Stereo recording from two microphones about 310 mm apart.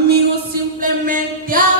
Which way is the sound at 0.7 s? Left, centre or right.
Right.